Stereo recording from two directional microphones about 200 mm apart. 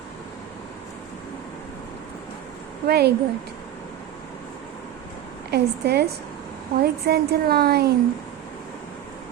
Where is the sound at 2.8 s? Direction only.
55° right (ahead or behind).